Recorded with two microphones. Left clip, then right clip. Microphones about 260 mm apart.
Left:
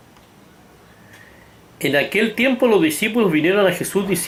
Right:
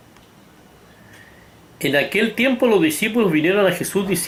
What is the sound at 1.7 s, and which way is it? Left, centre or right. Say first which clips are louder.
Speech: even; centre.